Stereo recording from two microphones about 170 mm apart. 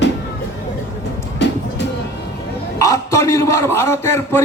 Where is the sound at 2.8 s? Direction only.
20° left (ahead or behind).